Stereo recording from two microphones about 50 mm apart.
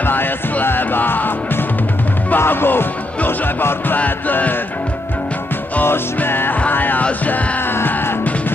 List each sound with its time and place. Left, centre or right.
0.0 s music: left
2.3 s music: left
3.3 s speech: left
4.0 s music: left
5.9 s music: left